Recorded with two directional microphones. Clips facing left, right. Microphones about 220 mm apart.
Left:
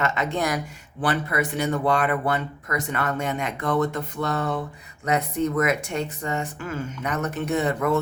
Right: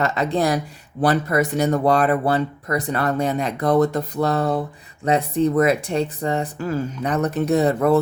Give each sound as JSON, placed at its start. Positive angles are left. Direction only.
{"t": 0.0, "sound": "speech", "side_deg": -35}